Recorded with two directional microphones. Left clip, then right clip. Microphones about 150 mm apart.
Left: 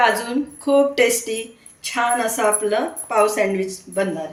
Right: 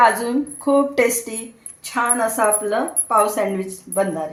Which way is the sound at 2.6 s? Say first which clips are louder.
Even; 50° right (ahead or behind).